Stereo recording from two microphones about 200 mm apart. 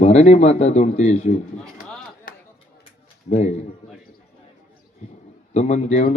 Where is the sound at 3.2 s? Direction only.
35° left (ahead or behind).